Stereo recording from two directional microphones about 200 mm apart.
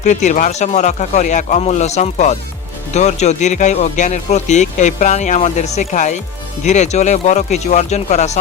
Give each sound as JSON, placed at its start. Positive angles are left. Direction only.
{"t": 0.0, "sound": "speech", "side_deg": 35}